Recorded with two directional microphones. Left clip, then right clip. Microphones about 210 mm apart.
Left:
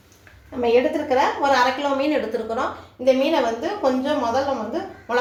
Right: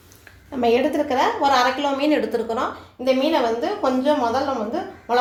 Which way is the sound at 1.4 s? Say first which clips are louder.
Even; 40° right (ahead or behind).